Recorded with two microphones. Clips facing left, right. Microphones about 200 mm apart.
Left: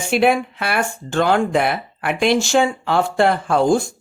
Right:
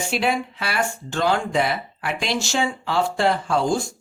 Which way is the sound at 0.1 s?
55° left (ahead or behind).